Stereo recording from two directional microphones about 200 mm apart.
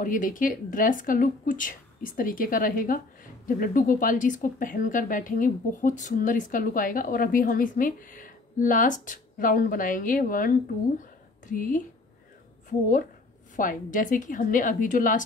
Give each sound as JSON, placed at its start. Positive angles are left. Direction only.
{"t": 0.0, "sound": "a woman's voice", "side_deg": 40}
{"t": 11.0, "sound": "a sound", "side_deg": 40}
{"t": 13.6, "sound": "a woman's voice", "side_deg": 40}